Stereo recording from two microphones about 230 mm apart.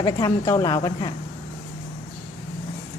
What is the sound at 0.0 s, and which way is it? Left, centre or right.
Speech, centre.